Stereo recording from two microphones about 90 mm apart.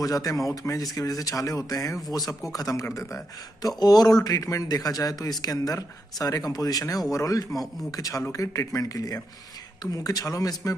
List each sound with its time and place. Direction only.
0.0 s speech: 40° left (ahead or behind)
3.6 s a man's voice: 45° left (ahead or behind)